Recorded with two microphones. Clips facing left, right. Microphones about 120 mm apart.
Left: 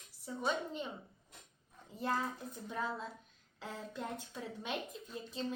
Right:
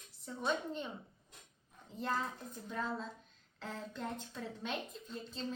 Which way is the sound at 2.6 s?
10° left (ahead or behind).